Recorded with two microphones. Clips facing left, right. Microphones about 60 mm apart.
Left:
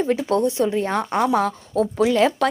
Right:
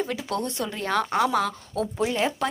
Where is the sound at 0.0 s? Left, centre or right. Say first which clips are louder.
Left 8 dB; left.